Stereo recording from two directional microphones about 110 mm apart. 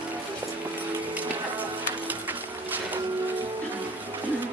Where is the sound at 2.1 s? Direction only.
15° right (ahead or behind).